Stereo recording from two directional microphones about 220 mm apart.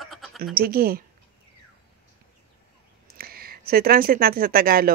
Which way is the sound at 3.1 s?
45° right (ahead or behind).